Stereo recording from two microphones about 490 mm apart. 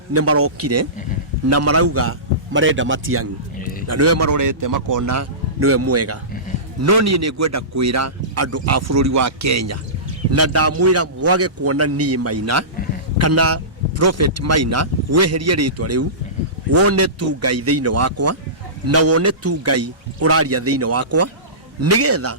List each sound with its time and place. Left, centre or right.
0.1 s speech: right
3.6 s a sound: centre
3.8 s a man's voice: right